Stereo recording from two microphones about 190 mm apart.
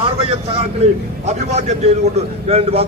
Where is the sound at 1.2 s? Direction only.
35° right (ahead or behind).